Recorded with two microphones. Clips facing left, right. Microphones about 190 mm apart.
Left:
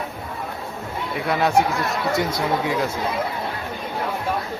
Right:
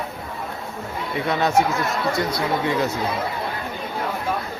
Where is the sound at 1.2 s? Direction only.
5° left (ahead or behind).